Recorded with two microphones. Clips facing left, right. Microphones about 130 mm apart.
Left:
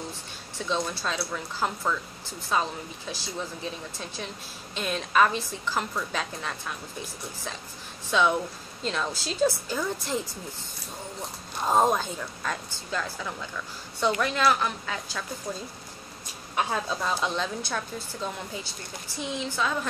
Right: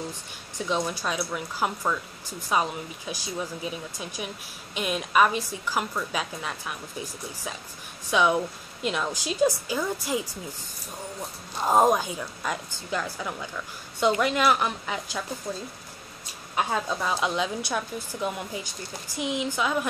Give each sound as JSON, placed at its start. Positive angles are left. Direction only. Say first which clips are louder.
{"t": 0.6, "sound": "speech", "louder": "right 2 dB", "side_deg": -15}
{"t": 8.1, "sound": "speech", "louder": "right 1 dB", "side_deg": -15}
{"t": 11.6, "sound": "speech", "louder": "right 2 dB", "side_deg": -15}
{"t": 16.5, "sound": "speech", "louder": "right 1 dB", "side_deg": -10}